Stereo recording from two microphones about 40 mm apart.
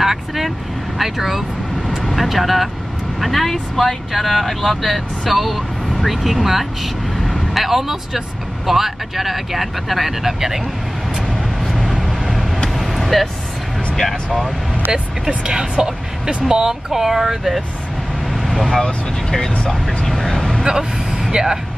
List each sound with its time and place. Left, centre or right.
0.0 s vehicle: centre
0.9 s speech: centre
11.6 s vehicle: centre
14.9 s speech: centre
16.4 s speech: centre
18.3 s vehicle: centre
18.8 s speech: centre
20.6 s vehicle: centre